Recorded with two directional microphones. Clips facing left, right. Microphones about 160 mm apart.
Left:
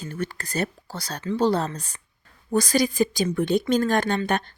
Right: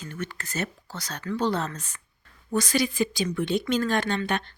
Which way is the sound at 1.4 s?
35° left (ahead or behind).